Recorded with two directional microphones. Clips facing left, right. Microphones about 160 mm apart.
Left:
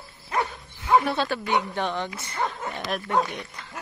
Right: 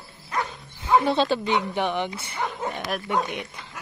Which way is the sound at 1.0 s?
20° right (ahead or behind).